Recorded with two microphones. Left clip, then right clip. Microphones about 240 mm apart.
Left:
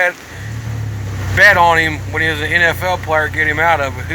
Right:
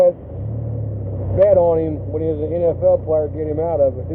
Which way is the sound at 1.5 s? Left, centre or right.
Left.